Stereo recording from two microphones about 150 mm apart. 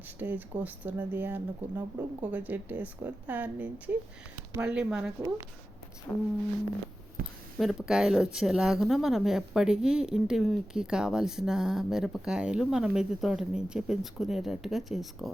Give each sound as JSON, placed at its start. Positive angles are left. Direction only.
{"t": 0.2, "sound": "speech", "side_deg": -10}
{"t": 6.1, "sound": "a sound", "side_deg": 10}
{"t": 7.2, "sound": "speech", "side_deg": -75}
{"t": 7.6, "sound": "speech", "side_deg": 0}